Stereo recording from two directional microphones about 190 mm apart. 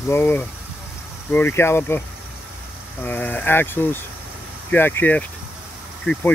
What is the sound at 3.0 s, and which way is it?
Speech, 10° left (ahead or behind).